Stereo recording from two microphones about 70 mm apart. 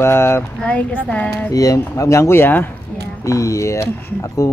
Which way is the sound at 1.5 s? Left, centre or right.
Left.